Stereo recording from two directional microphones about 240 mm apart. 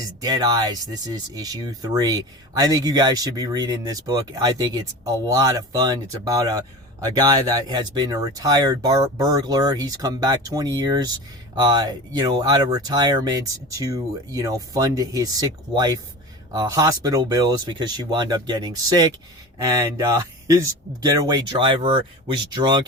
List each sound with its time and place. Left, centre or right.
0.2 s speech: centre